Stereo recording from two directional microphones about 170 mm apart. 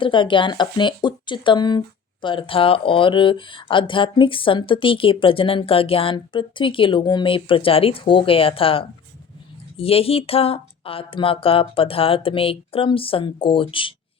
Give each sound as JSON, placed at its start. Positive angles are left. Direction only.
{"t": 0.0, "sound": "speech", "side_deg": 30}